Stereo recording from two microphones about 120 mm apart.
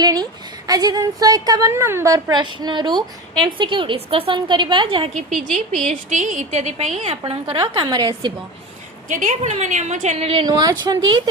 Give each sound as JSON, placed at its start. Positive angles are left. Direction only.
{"t": 0.0, "sound": "a sound", "side_deg": -35}
{"t": 0.7, "sound": "a woman's voice", "side_deg": -30}
{"t": 2.4, "sound": "a woman's voice", "side_deg": -40}
{"t": 6.1, "sound": "a woman's voice", "side_deg": -90}
{"t": 7.6, "sound": "speech", "side_deg": -35}
{"t": 9.0, "sound": "a woman's voice", "side_deg": -90}
{"t": 10.4, "sound": "speech", "side_deg": -30}